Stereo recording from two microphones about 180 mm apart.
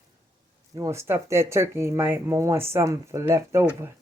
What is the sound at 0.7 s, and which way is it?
Speech, 15° right (ahead or behind).